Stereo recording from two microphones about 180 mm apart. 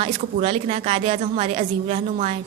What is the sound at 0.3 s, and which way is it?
Speech, 35° right (ahead or behind).